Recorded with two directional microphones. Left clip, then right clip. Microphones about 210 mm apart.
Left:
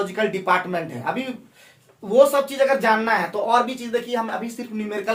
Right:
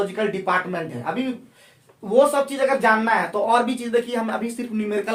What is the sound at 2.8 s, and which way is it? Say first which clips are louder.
Speech: right 1 dB; 15° right (ahead or behind).